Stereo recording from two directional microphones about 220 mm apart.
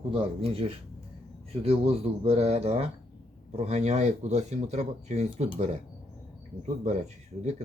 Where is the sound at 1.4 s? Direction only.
25° right (ahead or behind).